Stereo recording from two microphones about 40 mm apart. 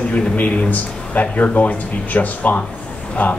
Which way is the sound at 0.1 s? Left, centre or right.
Left.